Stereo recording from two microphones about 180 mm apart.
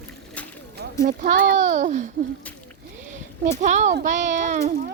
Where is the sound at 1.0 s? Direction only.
60° right (ahead or behind).